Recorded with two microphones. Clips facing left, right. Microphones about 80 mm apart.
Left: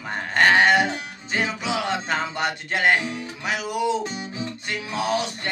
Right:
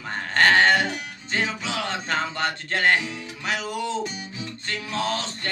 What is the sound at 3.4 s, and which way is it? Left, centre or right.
Music, centre.